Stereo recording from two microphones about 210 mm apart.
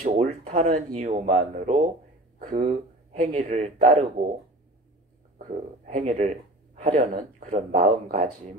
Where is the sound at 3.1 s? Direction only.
35° right (ahead or behind).